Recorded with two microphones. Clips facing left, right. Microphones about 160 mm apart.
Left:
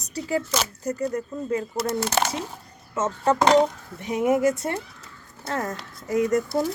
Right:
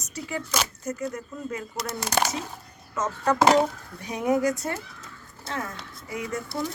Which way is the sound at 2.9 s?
25° left (ahead or behind).